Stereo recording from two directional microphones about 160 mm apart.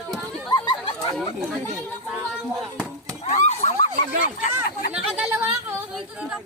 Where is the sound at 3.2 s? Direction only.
40° left (ahead or behind).